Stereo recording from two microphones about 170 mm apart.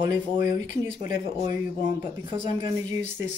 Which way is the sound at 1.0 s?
45° left (ahead or behind).